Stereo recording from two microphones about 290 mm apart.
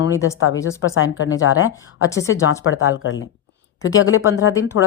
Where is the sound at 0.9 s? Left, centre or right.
Left.